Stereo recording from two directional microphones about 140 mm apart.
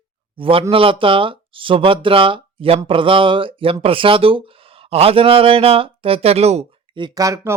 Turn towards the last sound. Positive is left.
turn(degrees=-25)  # may be behind; listen again after turning